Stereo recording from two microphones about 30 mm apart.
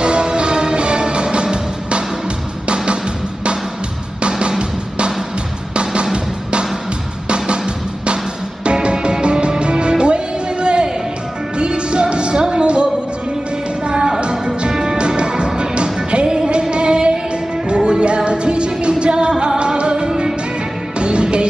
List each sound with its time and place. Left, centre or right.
0.0 s music: right
4.2 s music: right
7.2 s music: right
14.7 s music: right
15.0 s music: right
20.1 s music: centre
21.0 s music: right